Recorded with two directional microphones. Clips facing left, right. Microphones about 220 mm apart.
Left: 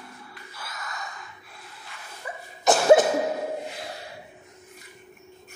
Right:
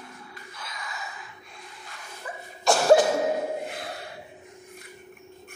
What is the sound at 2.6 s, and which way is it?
Cough, 20° left (ahead or behind).